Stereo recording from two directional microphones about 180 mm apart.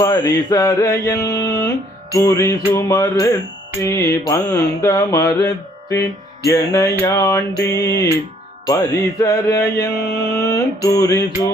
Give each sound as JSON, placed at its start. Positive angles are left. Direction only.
{"t": 0.0, "sound": "mantra", "side_deg": 20}